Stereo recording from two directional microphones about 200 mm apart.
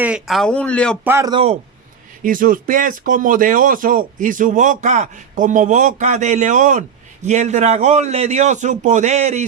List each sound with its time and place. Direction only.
0.0 s speech: 5° right (ahead or behind)
1.0 s speech: 15° right (ahead or behind)
2.2 s speech: 45° right (ahead or behind)